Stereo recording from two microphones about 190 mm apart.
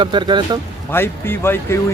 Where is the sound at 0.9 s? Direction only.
10° left (ahead or behind).